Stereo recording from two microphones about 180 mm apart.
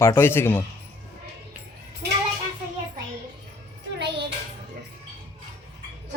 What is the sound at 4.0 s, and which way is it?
Music, 70° right (ahead or behind).